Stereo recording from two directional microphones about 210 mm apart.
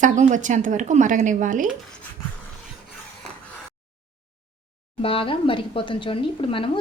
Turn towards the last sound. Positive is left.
turn(degrees=25)  # may be behind; listen again after turning